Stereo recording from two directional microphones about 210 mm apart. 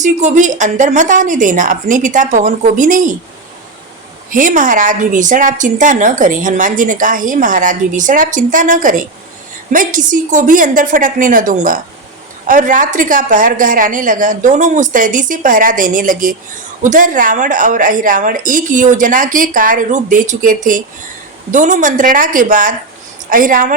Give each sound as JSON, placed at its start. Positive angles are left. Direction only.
{"t": 0.0, "sound": "a woman's voice", "side_deg": -35}
{"t": 4.3, "sound": "a woman's voice", "side_deg": -40}